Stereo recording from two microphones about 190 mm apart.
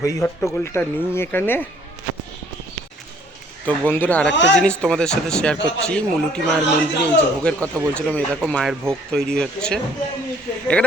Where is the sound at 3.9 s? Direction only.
10° left (ahead or behind).